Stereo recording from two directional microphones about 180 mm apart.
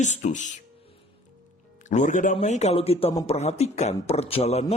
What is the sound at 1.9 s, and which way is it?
A man's voice, 45° left (ahead or behind).